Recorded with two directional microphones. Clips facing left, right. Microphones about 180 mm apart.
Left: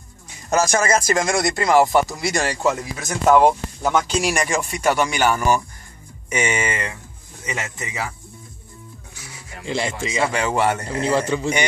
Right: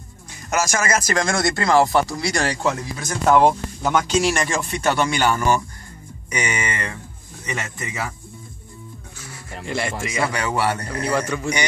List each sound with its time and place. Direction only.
0.5 s a man's voice: 30° left (ahead or behind); by 2.5 s 15° left (ahead or behind)
3.3 s speech: centre (ahead or behind)
6.3 s a man's voice: 25° left (ahead or behind)
9.1 s music: 15° left (ahead or behind)
9.7 s a man's voice: 20° left (ahead or behind)